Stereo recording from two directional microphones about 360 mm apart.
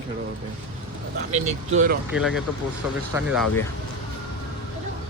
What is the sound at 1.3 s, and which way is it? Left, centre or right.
Speech, centre.